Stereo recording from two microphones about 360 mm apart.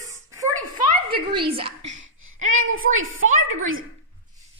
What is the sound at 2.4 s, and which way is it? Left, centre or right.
Speech, right.